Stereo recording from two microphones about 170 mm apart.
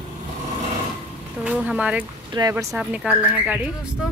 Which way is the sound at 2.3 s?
20° right (ahead or behind).